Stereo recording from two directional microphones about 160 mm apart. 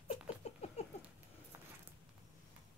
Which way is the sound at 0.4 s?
40° left (ahead or behind).